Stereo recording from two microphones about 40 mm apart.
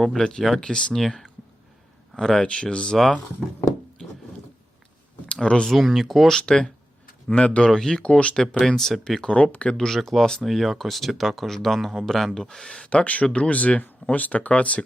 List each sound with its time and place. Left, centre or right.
0.0 s speech: centre
0.6 s speech: left
0.9 s speech: centre
2.4 s speech: left
5.3 s speech: left
5.7 s speech: centre
6.2 s speech: centre
7.7 s speech: centre
8.0 s speech: left
8.5 s speech: centre
10.4 s speech: centre
12.0 s speech: centre
12.9 s speech: left